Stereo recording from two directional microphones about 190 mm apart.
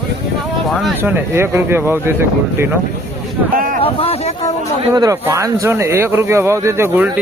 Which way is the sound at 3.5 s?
45° right (ahead or behind).